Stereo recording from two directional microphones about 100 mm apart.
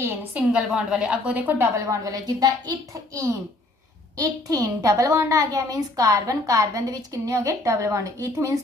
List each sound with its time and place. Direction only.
0.3 s a woman's voice: 10° right (ahead or behind)
1.9 s a woman's voice: 35° right (ahead or behind)
4.2 s a woman's voice: 35° right (ahead or behind)